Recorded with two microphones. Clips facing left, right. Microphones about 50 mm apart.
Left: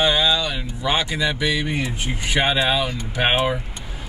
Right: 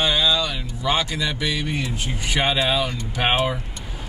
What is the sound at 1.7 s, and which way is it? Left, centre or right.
Speech, left.